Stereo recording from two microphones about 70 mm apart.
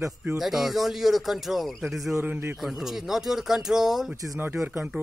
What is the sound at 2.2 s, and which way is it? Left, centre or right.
Speech, right.